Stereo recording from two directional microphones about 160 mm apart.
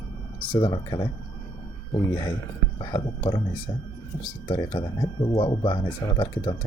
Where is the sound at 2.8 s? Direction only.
30° left (ahead or behind).